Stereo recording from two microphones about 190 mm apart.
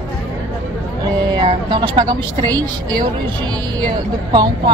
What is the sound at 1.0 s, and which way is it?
A woman's voice, 20° right (ahead or behind).